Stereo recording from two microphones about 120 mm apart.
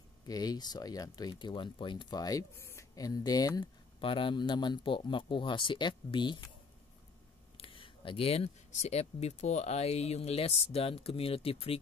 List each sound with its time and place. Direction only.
0.3 s speech: 35° left (ahead or behind)
4.0 s speech: 45° left (ahead or behind)
7.6 s speech: 45° left (ahead or behind)